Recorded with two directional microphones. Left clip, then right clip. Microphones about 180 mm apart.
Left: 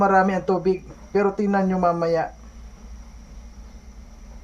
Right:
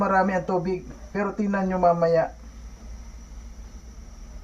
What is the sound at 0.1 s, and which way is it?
Speech, 65° left (ahead or behind).